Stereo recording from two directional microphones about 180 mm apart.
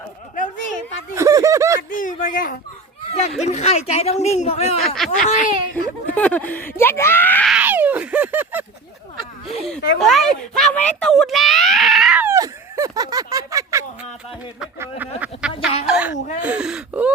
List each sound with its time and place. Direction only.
0.3 s a sound: 45° left (ahead or behind)
1.1 s speech: 20° right (ahead or behind)
1.9 s speech: 45° left (ahead or behind)
3.1 s speech: 35° left (ahead or behind)
4.9 s speech: centre (ahead or behind)
7.5 s a sound: 10° right (ahead or behind)
9.5 s speech: centre (ahead or behind)